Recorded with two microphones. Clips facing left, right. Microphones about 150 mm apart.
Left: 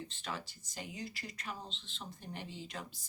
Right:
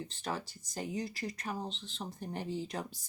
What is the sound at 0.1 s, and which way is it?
Speech, 40° right (ahead or behind).